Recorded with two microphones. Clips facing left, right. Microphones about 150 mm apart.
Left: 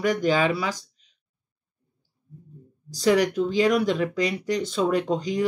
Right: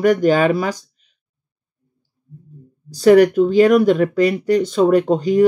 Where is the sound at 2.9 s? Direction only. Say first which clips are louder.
Right 10 dB; 50° right (ahead or behind).